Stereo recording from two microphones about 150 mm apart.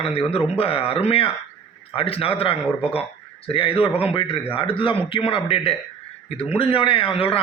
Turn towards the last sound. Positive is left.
turn(degrees=35)  # may be behind; listen again after turning